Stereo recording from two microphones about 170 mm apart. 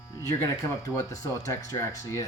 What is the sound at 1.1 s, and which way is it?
Speech, 20° left (ahead or behind).